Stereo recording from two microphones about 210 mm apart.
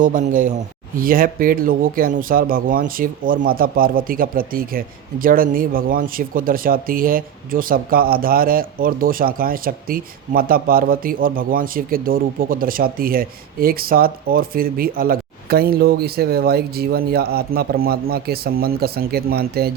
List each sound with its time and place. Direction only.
0.0 s speech: 35° right (ahead or behind)